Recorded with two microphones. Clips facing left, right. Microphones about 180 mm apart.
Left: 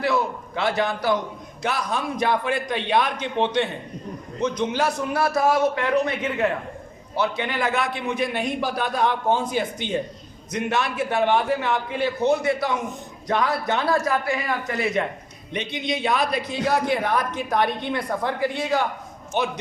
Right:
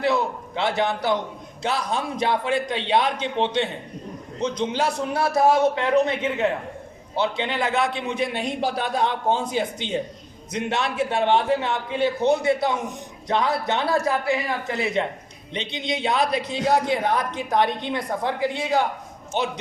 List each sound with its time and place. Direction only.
0.0 s a man's voice: 20° right (ahead or behind)
4.7 s a man's voice: 25° right (ahead or behind)